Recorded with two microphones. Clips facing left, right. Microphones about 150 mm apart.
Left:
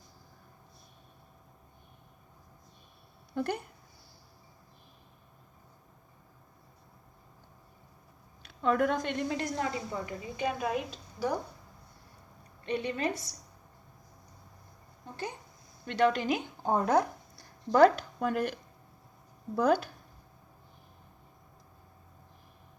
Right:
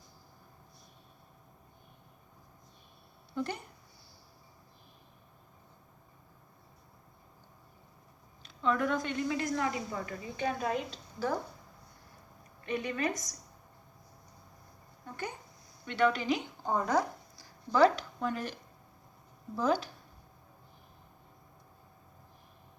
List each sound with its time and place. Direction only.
3.3 s speech: 55° left (ahead or behind)
8.6 s a woman's voice: 50° left (ahead or behind)
9.3 s a woman's voice: 30° left (ahead or behind); by 11.3 s 10° left (ahead or behind)
12.6 s a woman's voice: 30° left (ahead or behind)
15.0 s a sound: 30° left (ahead or behind)
16.0 s a woman's voice: 45° left (ahead or behind)
19.5 s speech: 55° left (ahead or behind)